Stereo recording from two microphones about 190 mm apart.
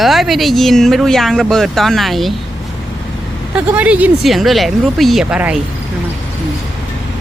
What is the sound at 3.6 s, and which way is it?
Speech, 10° right (ahead or behind).